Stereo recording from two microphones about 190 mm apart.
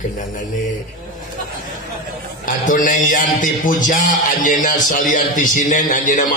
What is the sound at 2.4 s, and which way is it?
A man's voice, 45° left (ahead or behind).